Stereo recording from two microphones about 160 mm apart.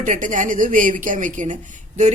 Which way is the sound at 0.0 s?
55° right (ahead or behind).